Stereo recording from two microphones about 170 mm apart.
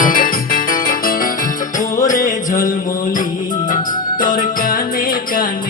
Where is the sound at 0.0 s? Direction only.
55° left (ahead or behind).